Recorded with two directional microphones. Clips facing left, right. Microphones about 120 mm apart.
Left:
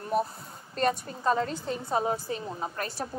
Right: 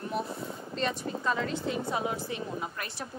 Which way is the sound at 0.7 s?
45° left (ahead or behind).